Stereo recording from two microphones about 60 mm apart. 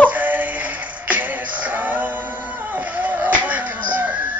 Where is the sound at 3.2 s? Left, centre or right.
Right.